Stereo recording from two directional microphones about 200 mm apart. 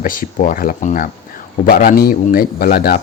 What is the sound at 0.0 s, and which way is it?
A man's voice, 45° left (ahead or behind).